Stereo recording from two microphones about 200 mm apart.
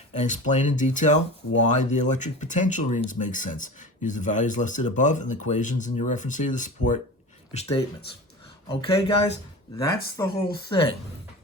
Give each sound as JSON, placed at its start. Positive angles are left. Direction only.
{"t": 0.1, "sound": "speech", "side_deg": 35}
{"t": 9.7, "sound": "speech", "side_deg": 15}